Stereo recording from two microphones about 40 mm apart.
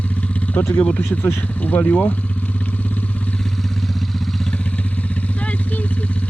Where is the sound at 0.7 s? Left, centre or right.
Left.